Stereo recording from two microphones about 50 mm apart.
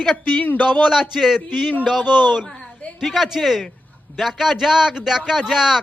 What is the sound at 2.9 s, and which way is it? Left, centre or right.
A man's voice, centre.